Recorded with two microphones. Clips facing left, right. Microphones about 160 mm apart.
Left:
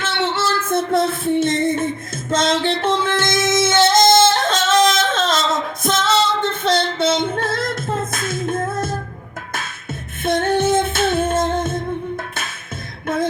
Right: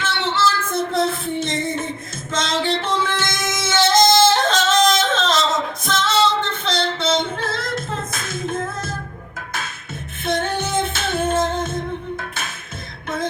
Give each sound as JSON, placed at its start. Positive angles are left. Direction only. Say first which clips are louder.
{"t": 0.0, "sound": "music", "louder": "even", "side_deg": 50}
{"t": 3.4, "sound": "music", "louder": "left 8 dB", "side_deg": 25}
{"t": 3.7, "sound": "yodeling", "louder": "even", "side_deg": 50}
{"t": 8.1, "sound": "music", "louder": "left 3 dB", "side_deg": 50}
{"t": 10.2, "sound": "female singing", "louder": "left 6 dB", "side_deg": 50}
{"t": 11.5, "sound": "music", "louder": "left 3 dB", "side_deg": 50}